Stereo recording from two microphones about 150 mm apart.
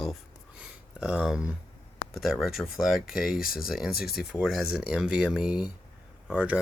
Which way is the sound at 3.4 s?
75° left (ahead or behind).